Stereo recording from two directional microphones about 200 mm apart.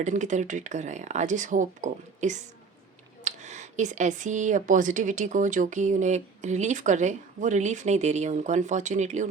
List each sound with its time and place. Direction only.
0.0 s speech: 35° right (ahead or behind)